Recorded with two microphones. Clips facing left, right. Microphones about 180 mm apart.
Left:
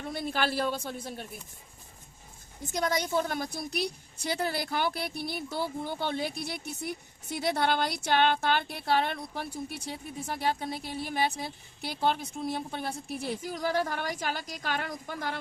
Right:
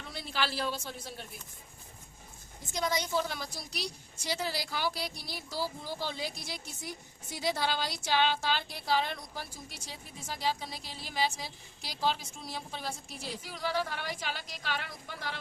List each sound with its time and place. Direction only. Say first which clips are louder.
0.0 s a woman's voice: left 5 dB; 50° left (ahead or behind)
2.7 s a woman's voice: left 3 dB; 50° left (ahead or behind)